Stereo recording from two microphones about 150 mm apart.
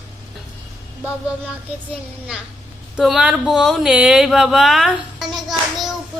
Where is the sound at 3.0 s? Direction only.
5° right (ahead or behind).